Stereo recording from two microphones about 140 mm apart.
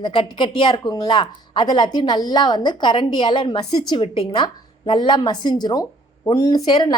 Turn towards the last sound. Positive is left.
turn(degrees=30)  # may be behind; listen again after turning